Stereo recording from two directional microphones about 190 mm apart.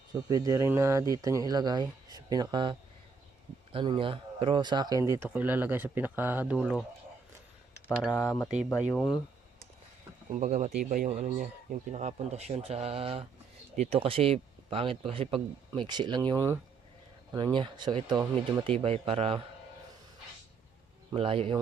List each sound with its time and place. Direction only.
0.1 s speech: 20° right (ahead or behind); by 6.8 s 5° right (ahead or behind)
8.8 s speech: centre (ahead or behind)
10.3 s speech: 35° right (ahead or behind)
21.1 s speech: 30° right (ahead or behind)